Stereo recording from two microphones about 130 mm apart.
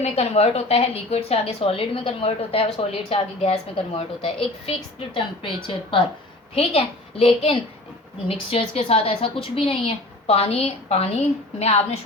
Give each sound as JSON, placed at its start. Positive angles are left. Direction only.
{"t": 0.0, "sound": "a woman's voice", "side_deg": 55}